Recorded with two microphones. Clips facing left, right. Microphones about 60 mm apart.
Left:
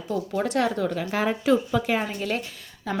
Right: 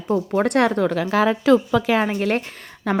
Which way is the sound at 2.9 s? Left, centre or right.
Right.